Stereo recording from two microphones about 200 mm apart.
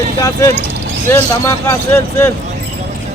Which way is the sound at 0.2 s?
15° left (ahead or behind).